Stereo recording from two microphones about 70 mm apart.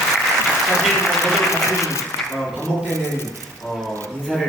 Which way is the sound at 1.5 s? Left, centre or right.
Left.